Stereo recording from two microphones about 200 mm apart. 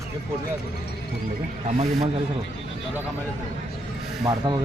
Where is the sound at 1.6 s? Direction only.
35° right (ahead or behind).